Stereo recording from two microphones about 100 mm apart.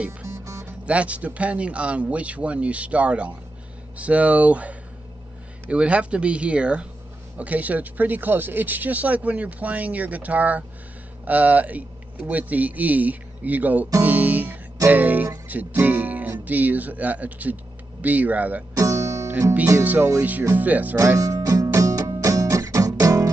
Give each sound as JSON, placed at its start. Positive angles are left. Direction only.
{"t": 0.3, "sound": "music", "side_deg": -30}
{"t": 0.8, "sound": "speech", "side_deg": -15}
{"t": 14.0, "sound": "music", "side_deg": -15}
{"t": 15.4, "sound": "speech", "side_deg": -15}
{"t": 18.8, "sound": "music", "side_deg": -35}
{"t": 19.8, "sound": "speech", "side_deg": -15}
{"t": 21.2, "sound": "music", "side_deg": -35}